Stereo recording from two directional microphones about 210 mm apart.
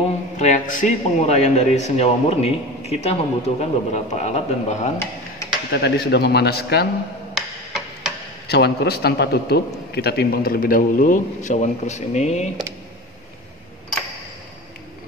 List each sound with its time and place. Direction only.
0.4 s a man's voice: 35° left (ahead or behind)
5.7 s a man's voice: 50° left (ahead or behind)
7.3 s tick-tock: centre (ahead or behind)
8.5 s a man's voice: 50° left (ahead or behind); by 12.4 s 35° left (ahead or behind)